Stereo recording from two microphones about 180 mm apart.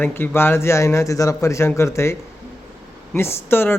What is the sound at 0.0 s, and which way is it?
Speech, 15° left (ahead or behind).